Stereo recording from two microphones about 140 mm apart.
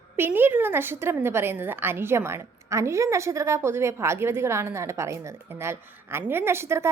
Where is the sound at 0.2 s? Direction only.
15° right (ahead or behind).